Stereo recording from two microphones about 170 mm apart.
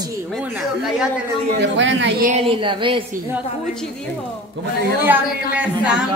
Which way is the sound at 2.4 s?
30° right (ahead or behind).